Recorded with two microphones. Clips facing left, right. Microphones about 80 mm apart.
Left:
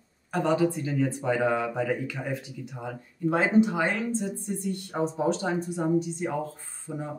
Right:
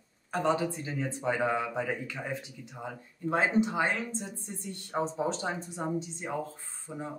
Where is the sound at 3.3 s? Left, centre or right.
Right.